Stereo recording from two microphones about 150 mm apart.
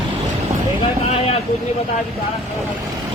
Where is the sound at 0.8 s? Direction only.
45° left (ahead or behind).